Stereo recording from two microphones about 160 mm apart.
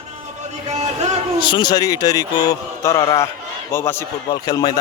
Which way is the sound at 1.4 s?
30° left (ahead or behind).